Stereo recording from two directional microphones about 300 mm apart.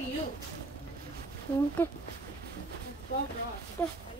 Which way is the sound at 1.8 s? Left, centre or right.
Centre.